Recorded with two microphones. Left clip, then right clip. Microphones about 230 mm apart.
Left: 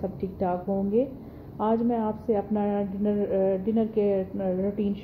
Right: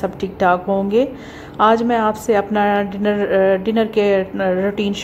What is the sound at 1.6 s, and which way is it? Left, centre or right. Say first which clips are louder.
A woman's voice: right 12 dB; centre.